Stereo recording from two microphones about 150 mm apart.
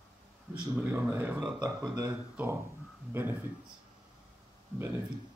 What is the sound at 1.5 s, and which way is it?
Speech, 25° right (ahead or behind).